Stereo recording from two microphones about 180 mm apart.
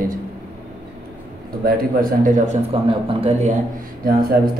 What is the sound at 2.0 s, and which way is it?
Speech, 45° right (ahead or behind).